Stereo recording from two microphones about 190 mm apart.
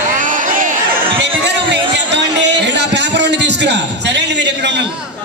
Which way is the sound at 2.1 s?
65° right (ahead or behind).